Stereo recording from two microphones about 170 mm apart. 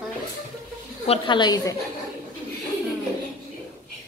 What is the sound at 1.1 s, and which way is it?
Speech, 25° left (ahead or behind).